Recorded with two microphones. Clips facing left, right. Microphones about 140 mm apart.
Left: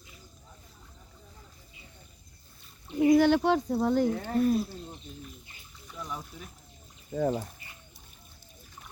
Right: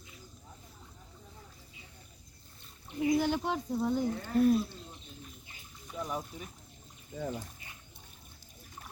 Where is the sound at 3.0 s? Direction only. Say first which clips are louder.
Left 8 dB; 85° left.